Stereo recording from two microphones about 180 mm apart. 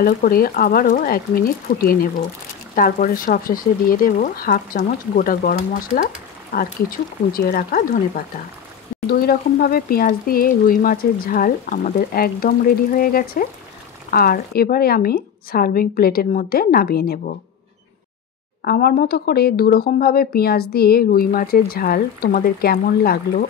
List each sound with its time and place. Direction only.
0.0 s speech: 55° left (ahead or behind)
9.0 s speech: 55° left (ahead or behind)
18.6 s speech: 60° left (ahead or behind)